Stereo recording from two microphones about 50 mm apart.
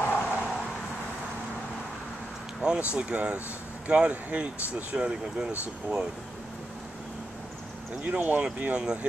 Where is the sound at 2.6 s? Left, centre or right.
Centre.